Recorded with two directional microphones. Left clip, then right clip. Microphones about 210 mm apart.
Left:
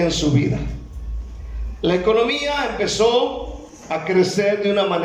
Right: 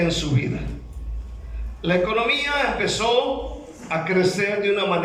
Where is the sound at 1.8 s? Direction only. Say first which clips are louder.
Left 4 dB; 25° left (ahead or behind).